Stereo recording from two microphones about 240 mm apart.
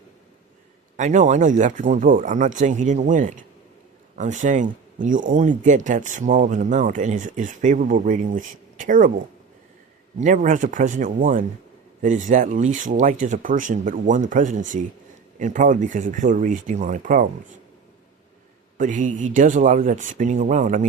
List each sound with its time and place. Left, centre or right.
0.9 s speech: right
10.2 s speech: right
18.8 s speech: right